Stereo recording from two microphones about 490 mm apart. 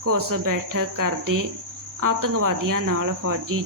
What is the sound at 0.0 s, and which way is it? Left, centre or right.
Speech, right.